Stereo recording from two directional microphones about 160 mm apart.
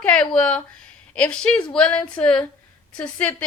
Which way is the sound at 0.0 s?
5° left (ahead or behind).